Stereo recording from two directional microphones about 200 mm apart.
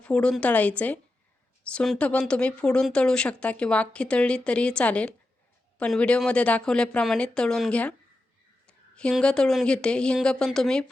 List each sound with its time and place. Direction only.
0.0 s a woman's voice: 5° left (ahead or behind)